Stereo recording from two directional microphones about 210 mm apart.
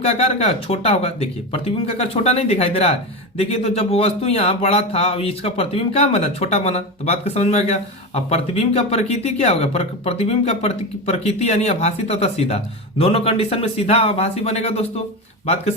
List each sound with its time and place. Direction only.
0.0 s speech: 30° left (ahead or behind)